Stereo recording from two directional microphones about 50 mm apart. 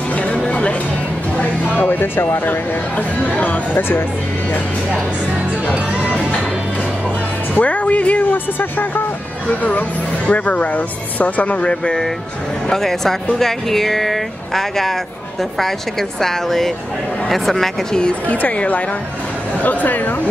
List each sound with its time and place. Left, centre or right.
0.2 s music: left
1.8 s speech: left
3.3 s speech: left
7.5 s speech: left
11.6 s speech: centre
12.6 s speech: centre
18.3 s speech: left